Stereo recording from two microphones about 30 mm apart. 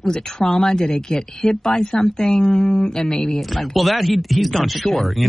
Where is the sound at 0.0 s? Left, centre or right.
Left.